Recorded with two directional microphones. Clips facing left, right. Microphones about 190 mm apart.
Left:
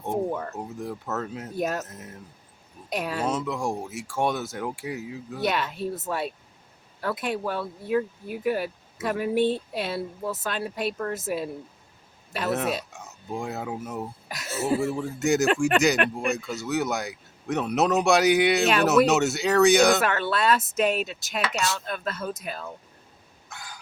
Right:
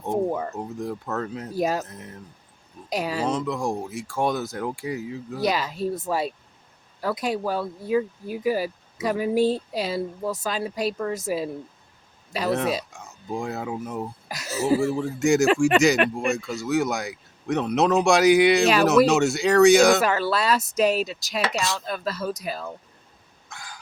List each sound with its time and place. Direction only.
0.1 s speech: 15° right (ahead or behind)
0.8 s speech: 5° left (ahead or behind)
23.5 s a sound: 5° left (ahead or behind)